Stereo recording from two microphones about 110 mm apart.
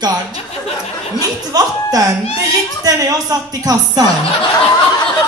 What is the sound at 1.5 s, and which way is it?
A man's voice, 35° right (ahead or behind).